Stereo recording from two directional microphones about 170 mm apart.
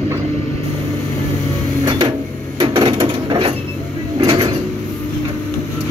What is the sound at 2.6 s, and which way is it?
Printer, 30° right (ahead or behind).